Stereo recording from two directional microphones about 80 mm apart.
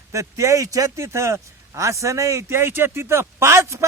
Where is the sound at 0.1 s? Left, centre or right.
Right.